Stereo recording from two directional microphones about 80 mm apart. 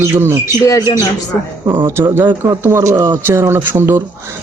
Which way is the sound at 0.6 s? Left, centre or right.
Left.